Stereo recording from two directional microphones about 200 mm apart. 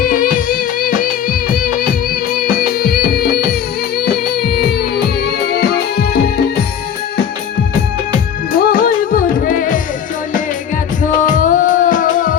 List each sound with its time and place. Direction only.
0.0 s music: 45° left (ahead or behind)
8.5 s music: 45° left (ahead or behind)
11.0 s music: 40° left (ahead or behind)